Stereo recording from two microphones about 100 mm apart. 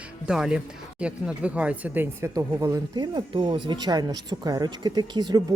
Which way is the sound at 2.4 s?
30° right (ahead or behind).